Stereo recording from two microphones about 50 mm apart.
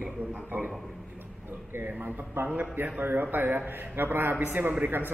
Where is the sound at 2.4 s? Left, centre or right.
Right.